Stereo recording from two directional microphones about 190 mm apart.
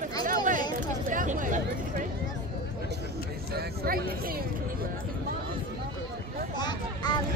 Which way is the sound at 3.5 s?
50° right (ahead or behind).